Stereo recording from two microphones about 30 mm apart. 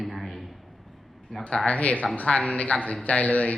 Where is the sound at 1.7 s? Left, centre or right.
Left.